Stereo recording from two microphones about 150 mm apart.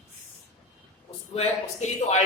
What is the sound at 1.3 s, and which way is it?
Speech, 50° left (ahead or behind).